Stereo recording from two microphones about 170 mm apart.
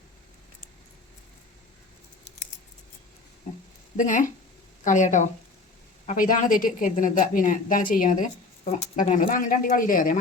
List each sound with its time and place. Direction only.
3.9 s a woman's voice: 50° left (ahead or behind)